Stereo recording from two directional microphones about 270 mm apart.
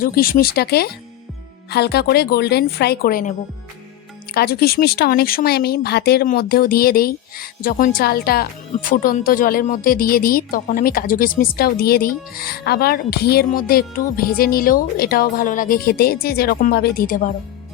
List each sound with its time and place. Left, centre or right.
0.0 s speech: left
4.4 s speech: left